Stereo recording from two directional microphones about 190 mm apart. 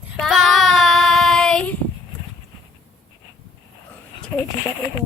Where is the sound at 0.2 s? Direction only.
Centre (ahead or behind).